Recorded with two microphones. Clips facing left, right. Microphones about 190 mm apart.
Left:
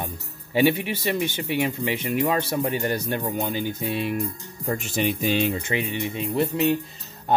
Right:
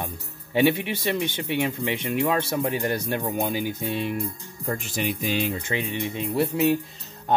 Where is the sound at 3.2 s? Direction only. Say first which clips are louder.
Even; 15° right (ahead or behind).